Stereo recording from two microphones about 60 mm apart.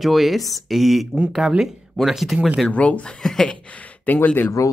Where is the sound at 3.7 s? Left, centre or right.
Left.